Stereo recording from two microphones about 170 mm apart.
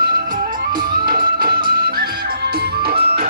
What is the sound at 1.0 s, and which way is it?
Music, 60° right (ahead or behind).